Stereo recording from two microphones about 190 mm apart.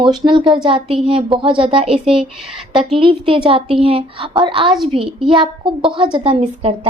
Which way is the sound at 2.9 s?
30° right (ahead or behind).